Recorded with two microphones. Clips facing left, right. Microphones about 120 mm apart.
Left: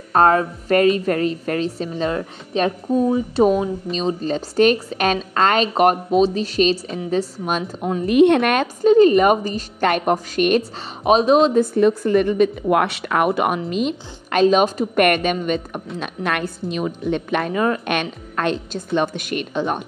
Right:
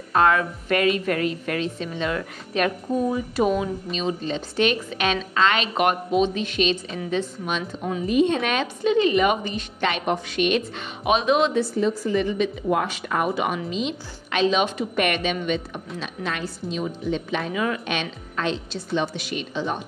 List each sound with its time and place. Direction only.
0.1 s a woman's voice: 40° left (ahead or behind)
8.0 s a woman's voice: 65° left (ahead or behind); by 11.3 s 35° left (ahead or behind)
11.4 s a woman's voice: 45° left (ahead or behind)
16.0 s a woman's voice: 60° left (ahead or behind)